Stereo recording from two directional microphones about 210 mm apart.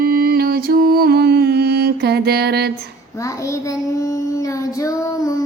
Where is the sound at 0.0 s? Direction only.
45° right (ahead or behind).